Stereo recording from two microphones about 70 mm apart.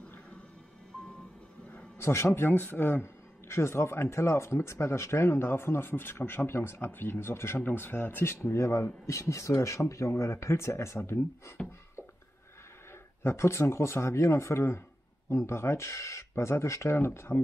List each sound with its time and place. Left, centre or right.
2.0 s speech: left
11.6 s a sound: centre
13.2 s speech: left